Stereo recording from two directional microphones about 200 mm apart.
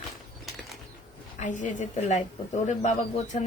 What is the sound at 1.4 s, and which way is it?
Speech, 40° left (ahead or behind).